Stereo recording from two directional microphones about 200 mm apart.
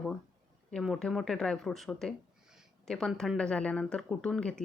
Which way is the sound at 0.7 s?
Centre (ahead or behind).